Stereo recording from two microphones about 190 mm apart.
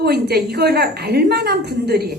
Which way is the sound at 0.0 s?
55° right (ahead or behind).